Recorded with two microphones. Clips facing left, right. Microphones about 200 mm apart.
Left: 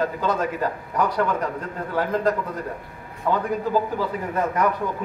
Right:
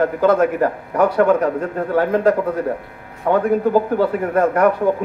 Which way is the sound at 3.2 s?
50° right (ahead or behind).